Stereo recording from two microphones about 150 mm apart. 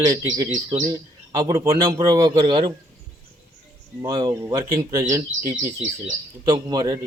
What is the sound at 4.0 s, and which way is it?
A man's voice, 25° right (ahead or behind).